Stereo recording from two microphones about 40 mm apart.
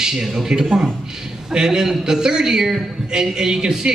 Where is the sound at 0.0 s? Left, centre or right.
Centre.